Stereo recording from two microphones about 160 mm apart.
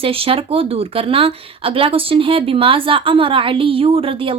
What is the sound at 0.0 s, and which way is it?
Speech, 35° right (ahead or behind).